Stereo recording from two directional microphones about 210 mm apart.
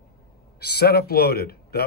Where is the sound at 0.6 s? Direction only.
50° left (ahead or behind).